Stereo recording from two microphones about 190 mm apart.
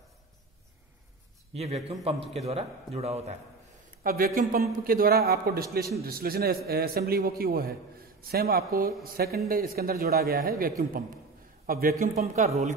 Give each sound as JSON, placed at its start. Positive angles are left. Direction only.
{"t": 1.5, "sound": "a man's voice", "side_deg": -30}
{"t": 4.0, "sound": "a man's voice", "side_deg": -50}